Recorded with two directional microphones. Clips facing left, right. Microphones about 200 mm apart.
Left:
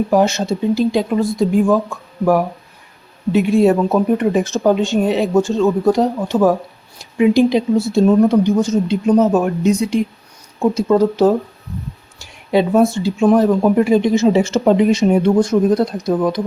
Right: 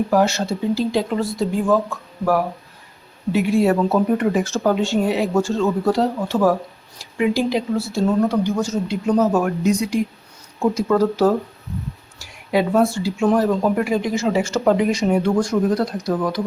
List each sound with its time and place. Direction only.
0.1 s speech: 20° left (ahead or behind)
3.3 s speech: 20° left (ahead or behind)